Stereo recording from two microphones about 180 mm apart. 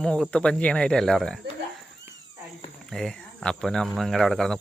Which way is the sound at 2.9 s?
5° left (ahead or behind).